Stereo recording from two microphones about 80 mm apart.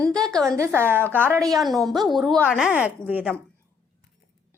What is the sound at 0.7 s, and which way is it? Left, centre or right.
Speech, right.